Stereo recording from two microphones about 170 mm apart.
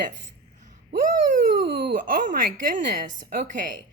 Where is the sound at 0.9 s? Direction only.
60° right (ahead or behind).